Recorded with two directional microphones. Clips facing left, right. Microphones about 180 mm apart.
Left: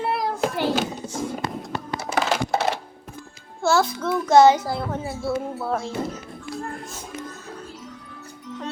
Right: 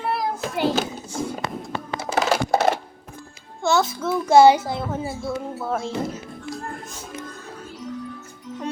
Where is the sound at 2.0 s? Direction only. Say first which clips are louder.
Right 2 dB; 35° right (ahead or behind).